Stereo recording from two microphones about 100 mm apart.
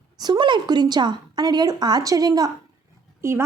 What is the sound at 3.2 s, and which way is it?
Speech, 25° right (ahead or behind).